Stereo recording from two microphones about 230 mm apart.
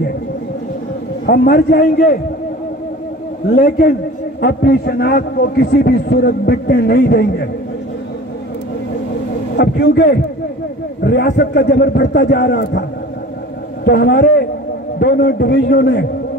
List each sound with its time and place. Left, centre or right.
1.2 s a man's voice: left
3.4 s a man's voice: left
9.6 s a man's voice: left
13.8 s a man's voice: left